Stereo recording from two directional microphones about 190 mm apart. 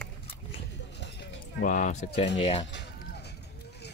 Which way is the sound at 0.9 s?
65° left (ahead or behind).